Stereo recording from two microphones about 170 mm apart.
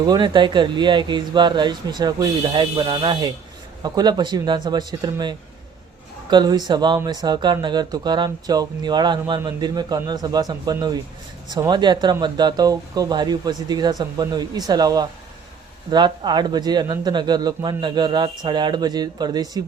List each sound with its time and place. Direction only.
0.0 s speech: 25° right (ahead or behind)